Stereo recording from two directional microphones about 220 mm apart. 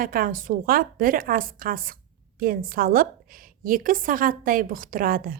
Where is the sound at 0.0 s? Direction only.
40° right (ahead or behind).